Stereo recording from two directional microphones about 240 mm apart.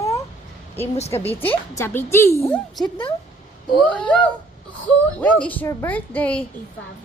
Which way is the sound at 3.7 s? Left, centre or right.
Centre.